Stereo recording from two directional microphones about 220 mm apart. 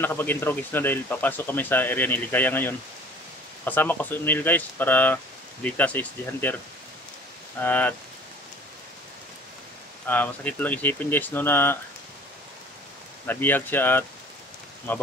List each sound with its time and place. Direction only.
0.0 s speech: 10° left (ahead or behind)
7.6 s speech: 10° left (ahead or behind)
10.0 s speech: 10° left (ahead or behind)
13.3 s speech: 10° left (ahead or behind)